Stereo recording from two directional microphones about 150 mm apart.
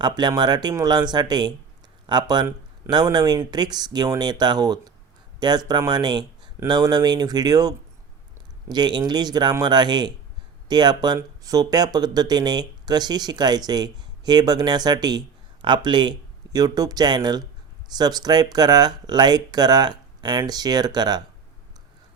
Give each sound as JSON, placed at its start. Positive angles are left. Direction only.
{"t": 0.0, "sound": "speech", "side_deg": -30}